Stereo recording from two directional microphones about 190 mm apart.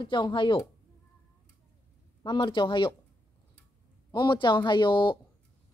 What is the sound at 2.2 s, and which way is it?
Speech, 25° left (ahead or behind).